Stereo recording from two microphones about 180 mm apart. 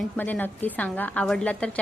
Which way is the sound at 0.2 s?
10° left (ahead or behind).